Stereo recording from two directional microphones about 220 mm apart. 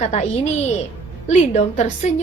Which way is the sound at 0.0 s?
30° left (ahead or behind).